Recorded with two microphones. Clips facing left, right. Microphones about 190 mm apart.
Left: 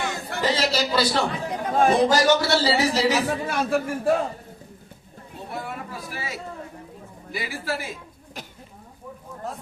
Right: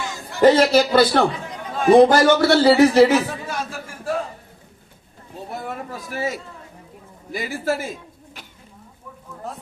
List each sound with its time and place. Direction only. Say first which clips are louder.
0.0 s a sound: left 2 dB; 60° left (ahead or behind)
0.4 s a man's voice: right 10 dB; 55° right (ahead or behind)
1.6 s a sound: left 6 dB; 50° left (ahead or behind)
1.9 s a man's voice: right 9 dB; 55° right (ahead or behind)
3.4 s a man's voice: left 6 dB; 60° left (ahead or behind)
5.5 s speech: right 3 dB; 45° right (ahead or behind)